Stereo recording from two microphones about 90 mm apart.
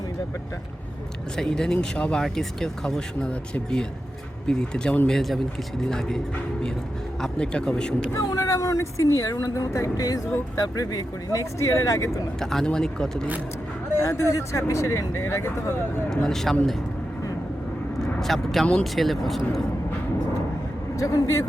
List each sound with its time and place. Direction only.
1.4 s speech: 5° left (ahead or behind)
8.3 s speech: 40° left (ahead or behind)
12.4 s speech: 5° left (ahead or behind)
14.0 s speech: 30° left (ahead or behind)
16.0 s speech: 5° left (ahead or behind)
18.2 s speech: 5° left (ahead or behind)
21.0 s speech: 40° left (ahead or behind)